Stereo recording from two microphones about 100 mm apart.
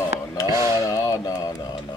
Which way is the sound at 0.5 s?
35° right (ahead or behind).